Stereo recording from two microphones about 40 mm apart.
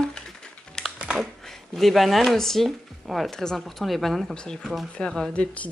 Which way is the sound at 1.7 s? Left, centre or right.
Centre.